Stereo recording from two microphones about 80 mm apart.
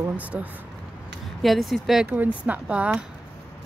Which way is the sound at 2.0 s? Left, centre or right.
Centre.